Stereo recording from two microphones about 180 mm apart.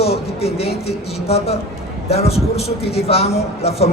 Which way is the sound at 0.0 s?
35° left (ahead or behind).